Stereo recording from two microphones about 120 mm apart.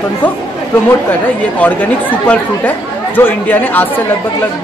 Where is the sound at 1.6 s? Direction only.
10° left (ahead or behind).